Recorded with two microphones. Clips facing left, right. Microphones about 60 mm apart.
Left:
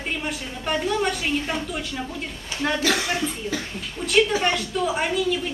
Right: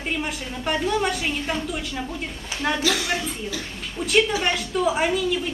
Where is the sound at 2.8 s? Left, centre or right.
Left.